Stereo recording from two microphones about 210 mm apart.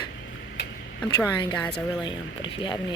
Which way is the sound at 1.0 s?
20° left (ahead or behind).